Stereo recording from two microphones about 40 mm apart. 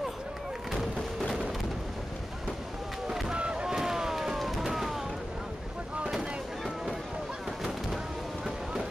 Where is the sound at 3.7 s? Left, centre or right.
Centre.